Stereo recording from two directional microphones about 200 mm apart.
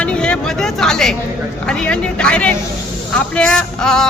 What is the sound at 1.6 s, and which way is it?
Speech, 5° left (ahead or behind).